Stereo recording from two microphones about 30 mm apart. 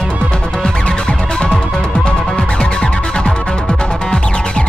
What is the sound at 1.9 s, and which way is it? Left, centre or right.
Music, left.